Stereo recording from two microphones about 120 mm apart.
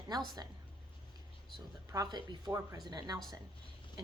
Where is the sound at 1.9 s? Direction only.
35° right (ahead or behind).